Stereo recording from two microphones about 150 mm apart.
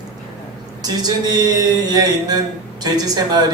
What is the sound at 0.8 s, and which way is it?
Speech, 25° right (ahead or behind).